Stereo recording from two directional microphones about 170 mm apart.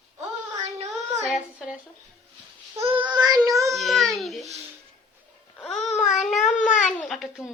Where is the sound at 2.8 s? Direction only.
30° right (ahead or behind).